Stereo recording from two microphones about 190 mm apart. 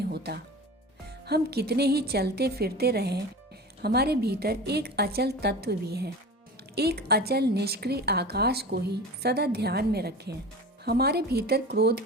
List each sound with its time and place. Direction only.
0.0 s speech: 55° right (ahead or behind)